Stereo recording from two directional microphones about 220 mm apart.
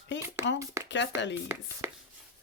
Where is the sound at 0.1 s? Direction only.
55° left (ahead or behind).